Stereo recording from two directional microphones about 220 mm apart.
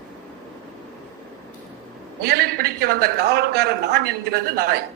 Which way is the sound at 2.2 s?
45° right (ahead or behind).